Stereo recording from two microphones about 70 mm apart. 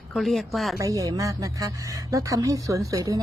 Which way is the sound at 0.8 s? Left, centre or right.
Right.